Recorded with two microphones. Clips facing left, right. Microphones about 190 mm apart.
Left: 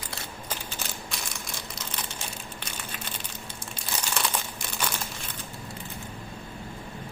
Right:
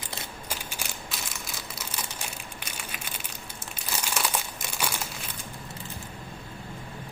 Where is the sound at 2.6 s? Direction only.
10° right (ahead or behind).